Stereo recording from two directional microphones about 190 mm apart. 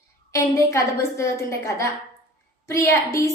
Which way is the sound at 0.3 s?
15° left (ahead or behind).